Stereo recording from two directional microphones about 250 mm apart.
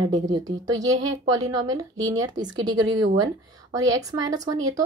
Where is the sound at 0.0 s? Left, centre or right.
Centre.